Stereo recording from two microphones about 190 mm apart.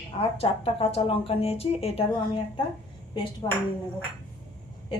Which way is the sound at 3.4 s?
20° left (ahead or behind).